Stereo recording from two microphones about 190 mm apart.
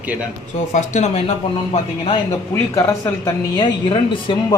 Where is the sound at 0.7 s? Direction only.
35° left (ahead or behind).